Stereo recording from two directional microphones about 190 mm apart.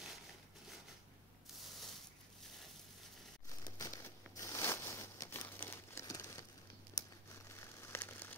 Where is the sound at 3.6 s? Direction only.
15° left (ahead or behind).